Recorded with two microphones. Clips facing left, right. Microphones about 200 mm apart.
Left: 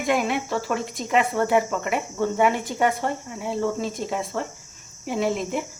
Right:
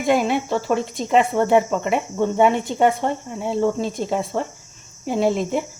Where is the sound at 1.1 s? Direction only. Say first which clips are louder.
Right 4 dB; 25° right (ahead or behind).